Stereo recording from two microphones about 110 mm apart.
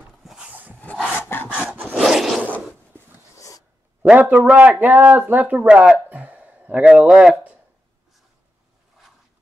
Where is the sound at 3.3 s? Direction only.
30° left (ahead or behind).